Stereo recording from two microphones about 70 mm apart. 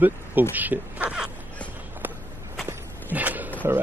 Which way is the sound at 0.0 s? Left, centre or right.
Right.